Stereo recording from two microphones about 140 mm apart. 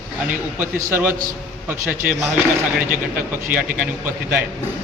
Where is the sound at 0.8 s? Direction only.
15° right (ahead or behind).